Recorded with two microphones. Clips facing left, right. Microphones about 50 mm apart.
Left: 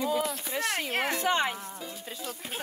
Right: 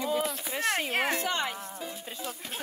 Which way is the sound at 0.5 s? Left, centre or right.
Right.